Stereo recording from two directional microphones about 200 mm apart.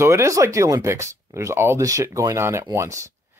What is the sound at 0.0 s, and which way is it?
Speech, 15° right (ahead or behind).